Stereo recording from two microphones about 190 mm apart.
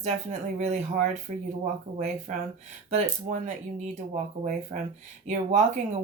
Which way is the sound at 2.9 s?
40° right (ahead or behind).